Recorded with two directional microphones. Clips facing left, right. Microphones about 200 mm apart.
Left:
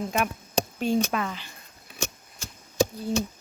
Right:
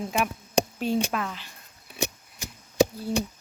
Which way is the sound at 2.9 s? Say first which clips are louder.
Left 1 dB; 5° right (ahead or behind).